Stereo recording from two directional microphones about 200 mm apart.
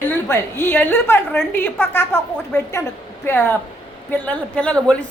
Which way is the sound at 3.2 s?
10° left (ahead or behind).